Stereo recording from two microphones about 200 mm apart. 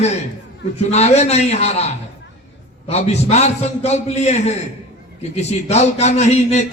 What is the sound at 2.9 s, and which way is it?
A man's voice, 35° left (ahead or behind).